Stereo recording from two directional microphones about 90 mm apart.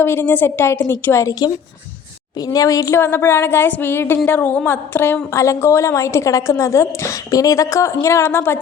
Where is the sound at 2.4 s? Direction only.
45° left (ahead or behind); by 5.2 s 25° left (ahead or behind).